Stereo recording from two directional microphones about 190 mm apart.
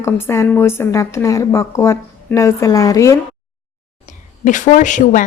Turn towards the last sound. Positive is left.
turn(degrees=40)  # may be behind; listen again after turning